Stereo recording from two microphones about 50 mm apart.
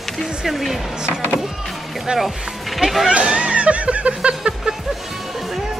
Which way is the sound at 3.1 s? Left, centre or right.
Right.